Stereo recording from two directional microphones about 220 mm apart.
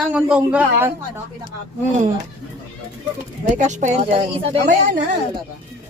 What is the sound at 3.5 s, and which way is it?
Speech, 35° right (ahead or behind).